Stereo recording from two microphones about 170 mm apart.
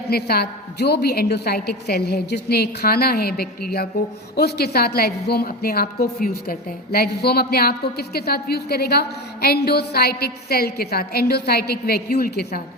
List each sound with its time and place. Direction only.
0.1 s a woman's voice: 70° left (ahead or behind)